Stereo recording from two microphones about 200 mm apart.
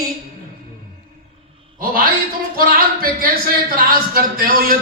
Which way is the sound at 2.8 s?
45° right (ahead or behind).